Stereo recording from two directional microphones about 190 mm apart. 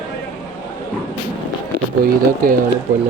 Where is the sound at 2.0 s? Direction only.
50° right (ahead or behind).